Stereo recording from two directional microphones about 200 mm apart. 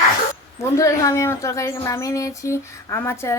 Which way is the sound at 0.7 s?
15° left (ahead or behind).